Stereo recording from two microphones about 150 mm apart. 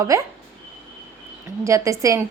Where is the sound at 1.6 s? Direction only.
20° right (ahead or behind).